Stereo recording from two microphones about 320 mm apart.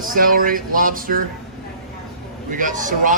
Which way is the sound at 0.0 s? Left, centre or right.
Right.